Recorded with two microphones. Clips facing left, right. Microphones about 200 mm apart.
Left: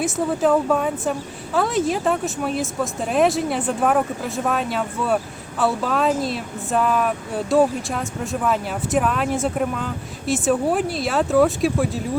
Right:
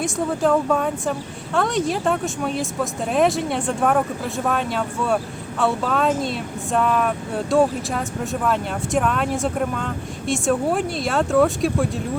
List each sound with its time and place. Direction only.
0.0 s speech: 5° left (ahead or behind)